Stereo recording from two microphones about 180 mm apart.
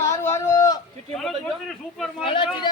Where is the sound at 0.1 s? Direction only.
15° left (ahead or behind).